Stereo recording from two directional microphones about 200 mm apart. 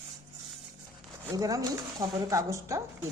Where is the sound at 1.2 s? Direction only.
15° right (ahead or behind).